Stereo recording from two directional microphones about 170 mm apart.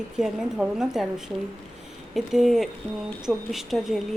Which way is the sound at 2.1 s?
Centre (ahead or behind).